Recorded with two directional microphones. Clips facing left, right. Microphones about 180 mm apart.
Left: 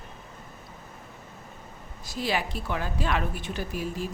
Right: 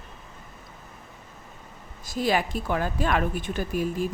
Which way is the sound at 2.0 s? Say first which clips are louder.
Right 4 dB; 50° right (ahead or behind).